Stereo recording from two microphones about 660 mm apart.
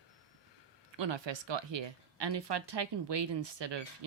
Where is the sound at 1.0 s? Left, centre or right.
Right.